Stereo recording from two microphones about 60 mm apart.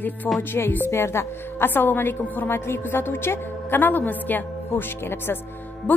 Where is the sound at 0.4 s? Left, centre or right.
Left.